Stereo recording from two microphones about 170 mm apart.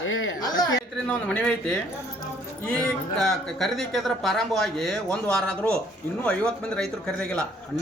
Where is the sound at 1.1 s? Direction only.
10° left (ahead or behind).